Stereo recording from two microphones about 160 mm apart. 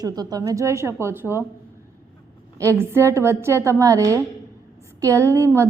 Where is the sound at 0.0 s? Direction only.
25° right (ahead or behind).